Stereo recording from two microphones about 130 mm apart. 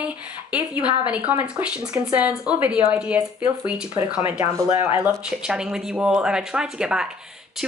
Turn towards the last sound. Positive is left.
turn(degrees=-5)  # may be behind; listen again after turning